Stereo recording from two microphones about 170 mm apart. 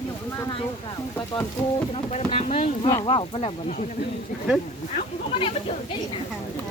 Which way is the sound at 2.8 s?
25° left (ahead or behind).